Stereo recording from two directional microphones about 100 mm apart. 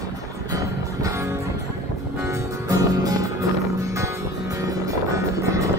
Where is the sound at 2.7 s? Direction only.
35° right (ahead or behind).